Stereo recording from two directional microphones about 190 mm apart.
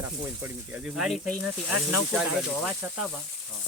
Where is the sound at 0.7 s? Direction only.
5° right (ahead or behind).